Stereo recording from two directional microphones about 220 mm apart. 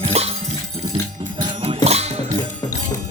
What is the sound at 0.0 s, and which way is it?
Music, 25° right (ahead or behind).